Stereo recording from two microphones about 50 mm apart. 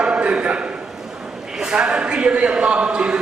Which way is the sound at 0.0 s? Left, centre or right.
Right.